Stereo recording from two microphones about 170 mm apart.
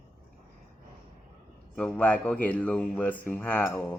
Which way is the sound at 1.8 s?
5° left (ahead or behind).